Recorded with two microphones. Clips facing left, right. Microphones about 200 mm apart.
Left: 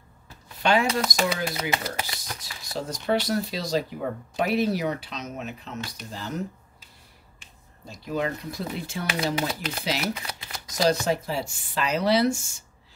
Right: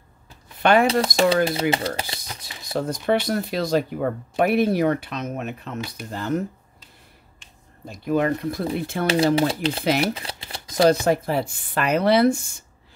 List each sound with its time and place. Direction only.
0.6 s speech: 55° right (ahead or behind)
1.0 s speech: 30° right (ahead or behind)
2.7 s speech: 55° right (ahead or behind)
7.9 s speech: 55° right (ahead or behind)
9.1 s speech: 30° right (ahead or behind)
10.1 s typewriter: 30° right (ahead or behind)
10.7 s speech: 55° right (ahead or behind)